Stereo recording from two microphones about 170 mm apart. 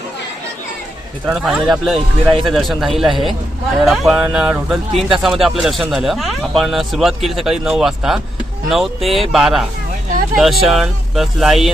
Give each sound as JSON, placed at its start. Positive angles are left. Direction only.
{"t": 1.3, "sound": "speech", "side_deg": 0}